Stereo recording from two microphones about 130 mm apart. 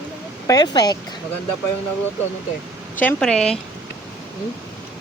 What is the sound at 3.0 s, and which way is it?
Speech, 10° left (ahead or behind).